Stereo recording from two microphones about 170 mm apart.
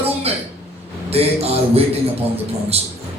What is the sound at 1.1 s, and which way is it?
Speech, 35° right (ahead or behind).